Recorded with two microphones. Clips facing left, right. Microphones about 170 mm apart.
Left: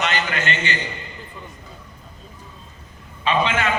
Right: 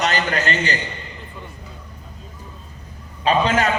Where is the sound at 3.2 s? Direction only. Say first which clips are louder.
Right 3 dB; 40° right (ahead or behind).